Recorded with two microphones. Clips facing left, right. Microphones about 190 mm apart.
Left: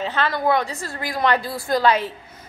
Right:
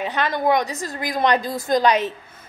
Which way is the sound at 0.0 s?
15° right (ahead or behind).